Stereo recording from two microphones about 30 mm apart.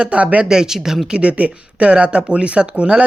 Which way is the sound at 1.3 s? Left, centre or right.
Right.